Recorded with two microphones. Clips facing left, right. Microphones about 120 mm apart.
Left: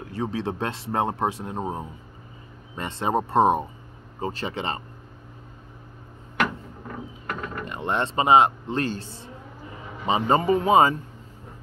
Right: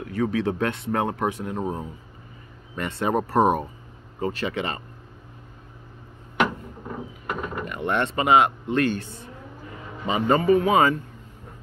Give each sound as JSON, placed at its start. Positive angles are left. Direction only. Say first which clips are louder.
{"t": 0.0, "sound": "speech", "louder": "right 4 dB", "side_deg": 30}
{"t": 7.6, "sound": "speech", "louder": "right 1 dB", "side_deg": 30}